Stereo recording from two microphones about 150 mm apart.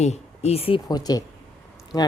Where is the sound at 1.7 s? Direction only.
25° left (ahead or behind).